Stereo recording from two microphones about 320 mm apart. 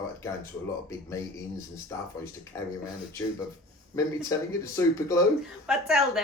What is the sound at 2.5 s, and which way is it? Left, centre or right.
Speech, centre.